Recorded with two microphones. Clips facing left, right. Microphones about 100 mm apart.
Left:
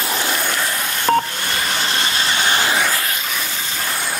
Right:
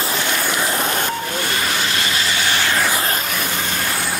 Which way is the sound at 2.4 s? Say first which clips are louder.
Left 3 dB; 20° left (ahead or behind).